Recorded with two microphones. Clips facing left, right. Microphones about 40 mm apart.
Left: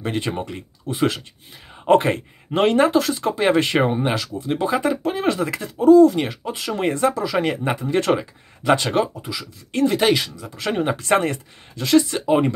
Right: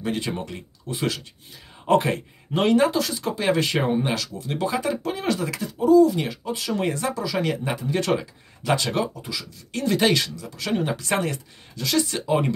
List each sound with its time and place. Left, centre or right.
0.0 s speech: left
5.9 s speech: left
9.8 s speech: centre
10.4 s speech: left
12.1 s speech: left